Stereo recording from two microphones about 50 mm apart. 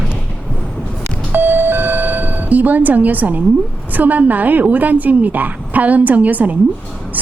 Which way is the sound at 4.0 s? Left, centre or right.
Right.